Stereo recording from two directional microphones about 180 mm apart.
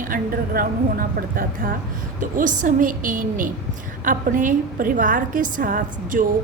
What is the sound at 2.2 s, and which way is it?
A woman's voice, 45° right (ahead or behind).